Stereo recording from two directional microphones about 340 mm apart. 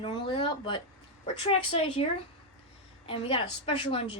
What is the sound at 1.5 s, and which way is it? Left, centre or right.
Speech, centre.